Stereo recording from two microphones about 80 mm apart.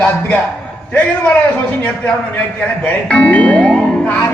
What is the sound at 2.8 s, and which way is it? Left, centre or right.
Speech, centre.